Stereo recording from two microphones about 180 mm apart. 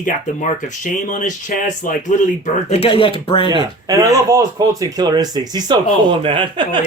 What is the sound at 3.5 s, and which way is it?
Speech, 20° right (ahead or behind).